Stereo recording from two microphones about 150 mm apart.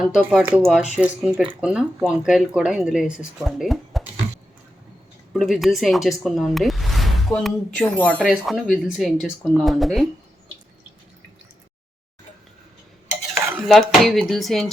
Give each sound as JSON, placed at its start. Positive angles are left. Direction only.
{"t": 0.0, "sound": "a woman's voice", "side_deg": -5}
{"t": 5.3, "sound": "speech", "side_deg": 0}
{"t": 8.2, "sound": "a woman's voice", "side_deg": 0}
{"t": 13.7, "sound": "a woman's voice", "side_deg": 0}